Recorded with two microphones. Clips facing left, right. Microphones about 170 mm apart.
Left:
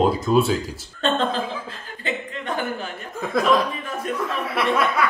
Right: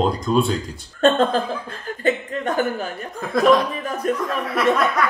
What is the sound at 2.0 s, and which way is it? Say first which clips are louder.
Chuckle: right 7 dB; 45° right (ahead or behind).